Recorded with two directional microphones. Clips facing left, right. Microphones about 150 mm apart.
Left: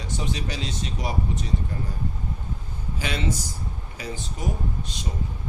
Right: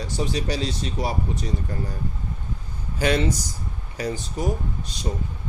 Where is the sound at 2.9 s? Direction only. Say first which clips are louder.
Right 7 dB; 45° right (ahead or behind).